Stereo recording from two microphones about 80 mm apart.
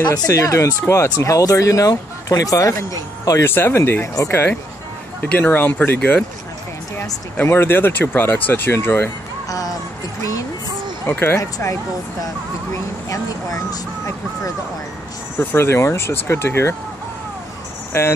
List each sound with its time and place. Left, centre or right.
0.0 s speech: left
0.3 s speech: left
3.4 s speech: left
7.4 s speech: left
9.5 s music: left
11.1 s speech: left
11.3 s speech: left
13.1 s speech: left
15.3 s speech: left
17.9 s speech: left